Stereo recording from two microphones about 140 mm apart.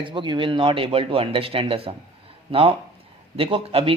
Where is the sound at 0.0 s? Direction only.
35° right (ahead or behind).